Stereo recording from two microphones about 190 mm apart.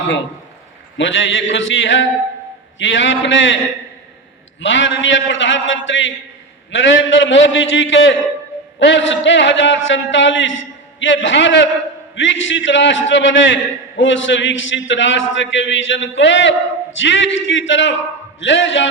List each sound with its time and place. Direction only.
0.9 s a man's voice: 75° left (ahead or behind)
4.6 s a man's voice: 80° left